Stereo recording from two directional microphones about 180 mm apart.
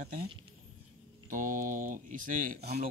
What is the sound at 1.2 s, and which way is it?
Speech, 50° right (ahead or behind).